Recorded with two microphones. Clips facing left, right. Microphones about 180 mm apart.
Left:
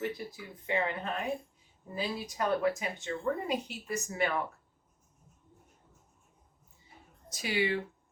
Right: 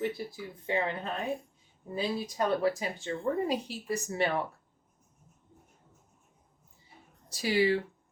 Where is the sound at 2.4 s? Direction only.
30° right (ahead or behind).